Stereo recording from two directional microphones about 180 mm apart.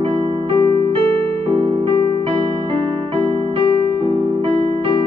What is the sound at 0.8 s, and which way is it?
Electric piano, 35° right (ahead or behind).